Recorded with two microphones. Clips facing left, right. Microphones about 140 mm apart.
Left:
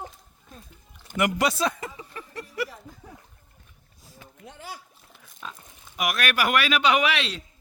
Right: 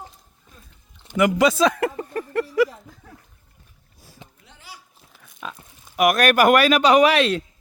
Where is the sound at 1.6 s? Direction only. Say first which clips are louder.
Right 9 dB; 80° right; by 2.4 s 50° right (ahead or behind).